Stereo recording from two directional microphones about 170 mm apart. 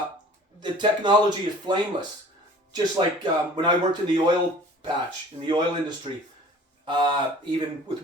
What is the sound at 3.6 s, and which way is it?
Speech, 25° right (ahead or behind).